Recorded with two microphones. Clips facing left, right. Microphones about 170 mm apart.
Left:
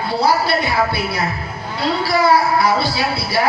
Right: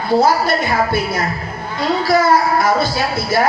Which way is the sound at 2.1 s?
45° right (ahead or behind).